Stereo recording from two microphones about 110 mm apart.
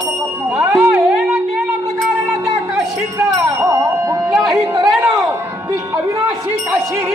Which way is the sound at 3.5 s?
30° right (ahead or behind).